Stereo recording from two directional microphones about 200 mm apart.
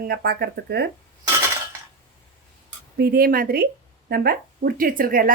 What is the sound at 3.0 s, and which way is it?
Speech, 50° right (ahead or behind).